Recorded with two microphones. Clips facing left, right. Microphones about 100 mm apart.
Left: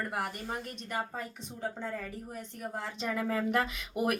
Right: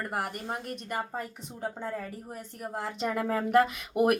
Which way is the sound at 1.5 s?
25° right (ahead or behind).